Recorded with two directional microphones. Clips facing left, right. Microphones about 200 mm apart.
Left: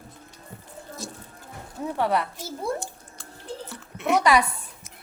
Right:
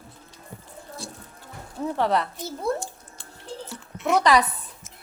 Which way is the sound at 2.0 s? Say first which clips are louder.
Even; 10° left (ahead or behind).